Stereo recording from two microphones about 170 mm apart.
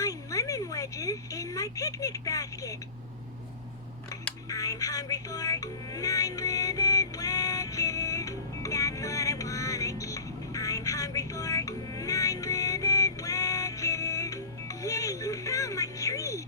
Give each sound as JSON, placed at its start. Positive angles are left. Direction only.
{"t": 0.0, "sound": "speech", "side_deg": 20}
{"t": 4.1, "sound": "music", "side_deg": 20}